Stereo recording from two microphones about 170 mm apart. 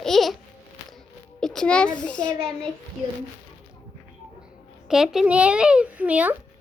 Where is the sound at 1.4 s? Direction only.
5° left (ahead or behind).